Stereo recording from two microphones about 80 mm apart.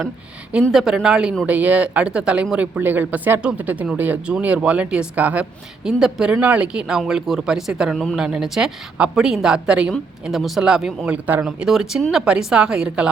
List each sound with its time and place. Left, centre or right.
0.7 s speech: centre
1.5 s speech: centre
5.8 s speech: centre
11.4 s speech: centre